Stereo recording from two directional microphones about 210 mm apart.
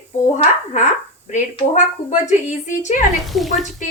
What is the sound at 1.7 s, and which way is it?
Speech, 35° left (ahead or behind).